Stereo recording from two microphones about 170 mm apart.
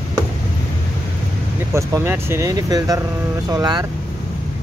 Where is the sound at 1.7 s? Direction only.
15° right (ahead or behind).